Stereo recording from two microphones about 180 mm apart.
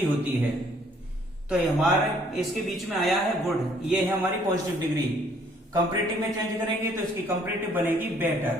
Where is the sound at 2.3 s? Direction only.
Centre (ahead or behind).